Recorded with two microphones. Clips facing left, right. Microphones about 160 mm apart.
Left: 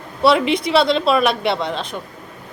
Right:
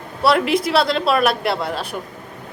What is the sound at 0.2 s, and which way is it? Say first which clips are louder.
Speech: left 1 dB; centre (ahead or behind).